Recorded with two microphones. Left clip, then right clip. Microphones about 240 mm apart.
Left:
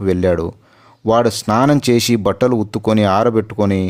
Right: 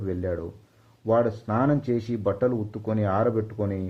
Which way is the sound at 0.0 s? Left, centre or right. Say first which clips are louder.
Left 14 dB; left.